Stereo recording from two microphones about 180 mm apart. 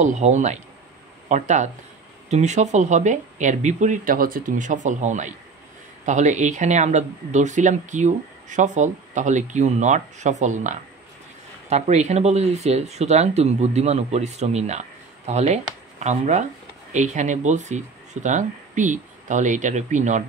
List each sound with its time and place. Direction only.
0.0 s speech: 40° right (ahead or behind)